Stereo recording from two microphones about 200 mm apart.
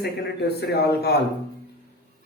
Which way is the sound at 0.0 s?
55° left (ahead or behind).